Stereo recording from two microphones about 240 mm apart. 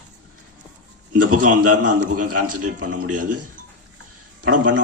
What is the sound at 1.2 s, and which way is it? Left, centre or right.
A man's voice, right.